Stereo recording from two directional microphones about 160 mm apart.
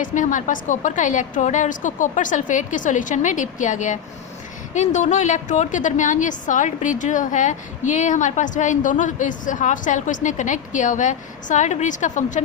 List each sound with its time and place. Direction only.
0.0 s a woman's voice: 55° left (ahead or behind)